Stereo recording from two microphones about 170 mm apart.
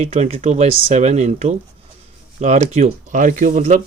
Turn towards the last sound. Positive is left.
turn(degrees=-45)  # may be behind; listen again after turning